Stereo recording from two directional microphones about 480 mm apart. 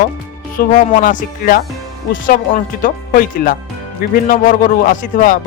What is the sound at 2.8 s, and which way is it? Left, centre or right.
Speech, centre.